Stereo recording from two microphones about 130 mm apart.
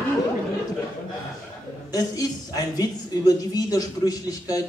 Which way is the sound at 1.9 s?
30° left (ahead or behind).